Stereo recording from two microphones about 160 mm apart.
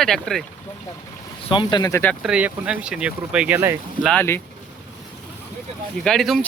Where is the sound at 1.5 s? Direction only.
30° left (ahead or behind).